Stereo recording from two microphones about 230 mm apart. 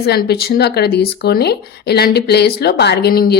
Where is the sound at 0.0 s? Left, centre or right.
Left.